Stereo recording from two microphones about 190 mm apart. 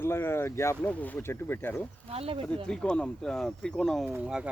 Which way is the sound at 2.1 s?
30° right (ahead or behind).